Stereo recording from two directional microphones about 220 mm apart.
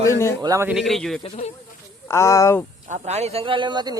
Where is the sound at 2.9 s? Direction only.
30° right (ahead or behind).